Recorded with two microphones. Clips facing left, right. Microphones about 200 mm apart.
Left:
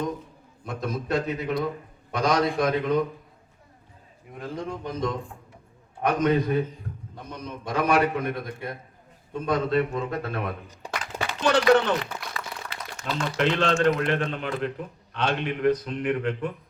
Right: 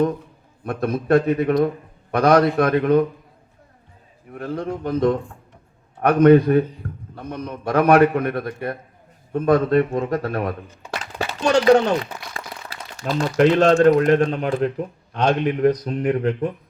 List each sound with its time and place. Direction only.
0.6 s a man's voice: 60° right (ahead or behind)
4.4 s a man's voice: 60° right (ahead or behind); by 10.5 s 40° right (ahead or behind)
11.0 s a sound: 30° right (ahead or behind)
11.7 s speech: 40° right (ahead or behind)